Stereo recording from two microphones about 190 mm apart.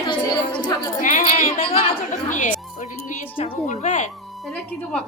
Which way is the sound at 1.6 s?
30° left (ahead or behind).